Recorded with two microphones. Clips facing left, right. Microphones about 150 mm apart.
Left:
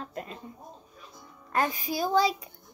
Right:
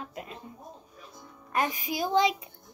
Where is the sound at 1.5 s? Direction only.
15° right (ahead or behind).